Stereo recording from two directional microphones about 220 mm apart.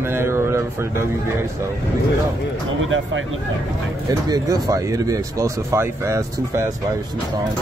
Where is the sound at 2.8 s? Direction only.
60° right (ahead or behind).